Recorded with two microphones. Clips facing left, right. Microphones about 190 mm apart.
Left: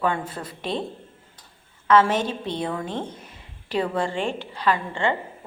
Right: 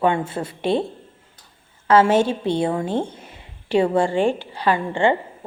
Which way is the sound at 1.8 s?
30° right (ahead or behind).